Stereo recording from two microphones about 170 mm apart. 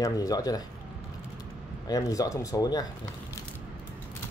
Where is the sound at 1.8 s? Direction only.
20° left (ahead or behind).